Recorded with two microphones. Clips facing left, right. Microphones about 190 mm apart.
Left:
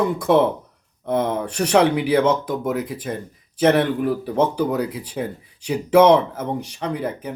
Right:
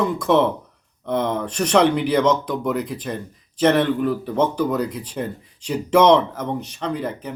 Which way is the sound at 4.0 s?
10° left (ahead or behind).